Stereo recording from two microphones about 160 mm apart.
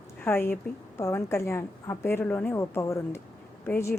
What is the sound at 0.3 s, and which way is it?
A woman's voice, 15° left (ahead or behind).